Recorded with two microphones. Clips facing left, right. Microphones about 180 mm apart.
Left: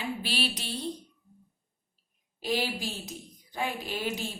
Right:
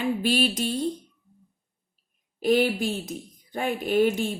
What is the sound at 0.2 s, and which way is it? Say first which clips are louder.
Speech: right 9 dB; 45° right (ahead or behind).